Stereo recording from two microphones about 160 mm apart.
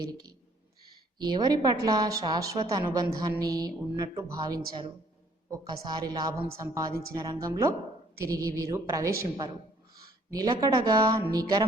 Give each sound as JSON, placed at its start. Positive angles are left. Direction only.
{"t": 0.1, "sound": "a woman's voice", "side_deg": -25}